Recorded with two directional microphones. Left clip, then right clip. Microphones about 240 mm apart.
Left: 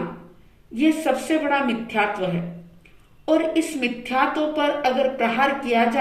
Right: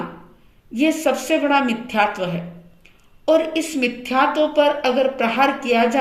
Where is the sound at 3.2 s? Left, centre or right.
Right.